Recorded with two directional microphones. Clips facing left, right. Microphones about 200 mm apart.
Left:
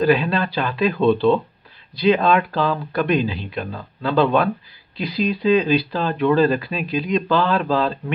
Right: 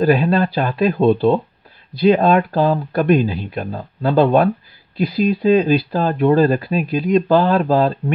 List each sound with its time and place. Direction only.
0.0 s speech: 45° right (ahead or behind)